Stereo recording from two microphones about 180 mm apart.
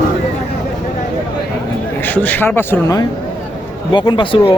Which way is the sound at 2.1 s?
10° left (ahead or behind).